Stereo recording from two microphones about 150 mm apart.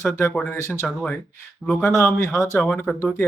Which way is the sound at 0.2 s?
10° left (ahead or behind).